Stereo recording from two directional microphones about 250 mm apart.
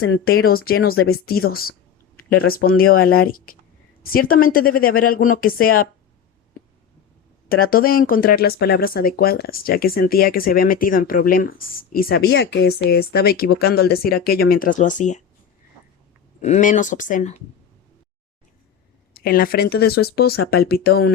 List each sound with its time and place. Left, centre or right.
1.0 s speech: left
2.7 s speech: left
7.4 s speech: left
16.4 s speech: left
19.1 s speech: left